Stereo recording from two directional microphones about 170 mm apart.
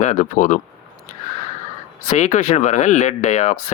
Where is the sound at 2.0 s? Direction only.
45° left (ahead or behind).